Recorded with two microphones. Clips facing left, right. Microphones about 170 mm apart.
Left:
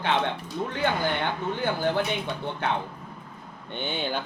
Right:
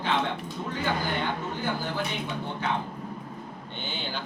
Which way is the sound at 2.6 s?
65° left (ahead or behind).